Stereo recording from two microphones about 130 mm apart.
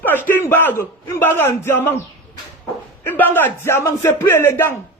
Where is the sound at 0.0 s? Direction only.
15° left (ahead or behind).